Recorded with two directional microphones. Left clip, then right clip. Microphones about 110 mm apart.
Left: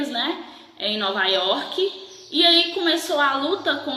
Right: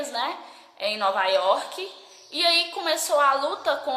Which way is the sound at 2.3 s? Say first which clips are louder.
Left 5 dB; 30° right (ahead or behind).